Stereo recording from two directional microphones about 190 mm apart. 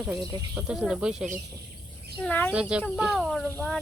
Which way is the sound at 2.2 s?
10° left (ahead or behind).